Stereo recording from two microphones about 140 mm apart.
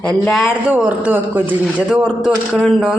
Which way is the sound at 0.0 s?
5° left (ahead or behind).